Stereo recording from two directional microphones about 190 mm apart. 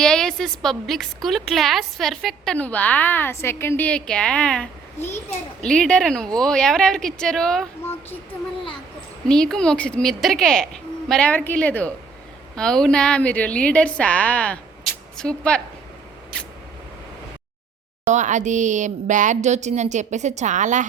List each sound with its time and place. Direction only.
0.0 s a woman's voice: 5° left (ahead or behind)
9.2 s a woman's voice: 5° left (ahead or behind)
18.0 s a woman's voice: 40° right (ahead or behind)